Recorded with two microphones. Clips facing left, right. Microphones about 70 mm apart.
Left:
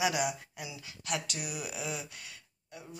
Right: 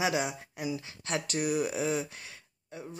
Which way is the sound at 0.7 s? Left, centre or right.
Right.